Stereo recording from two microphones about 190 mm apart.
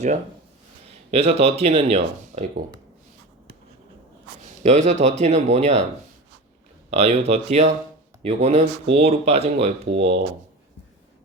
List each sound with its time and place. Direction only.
1.1 s speech: 30° right (ahead or behind)
4.6 s speech: 35° right (ahead or behind)
6.9 s speech: 30° right (ahead or behind)